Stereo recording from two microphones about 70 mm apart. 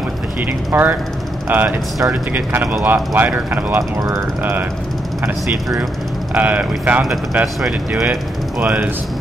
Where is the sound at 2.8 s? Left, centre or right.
Right.